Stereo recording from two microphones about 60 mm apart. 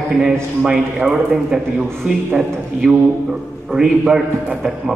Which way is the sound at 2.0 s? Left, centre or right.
Right.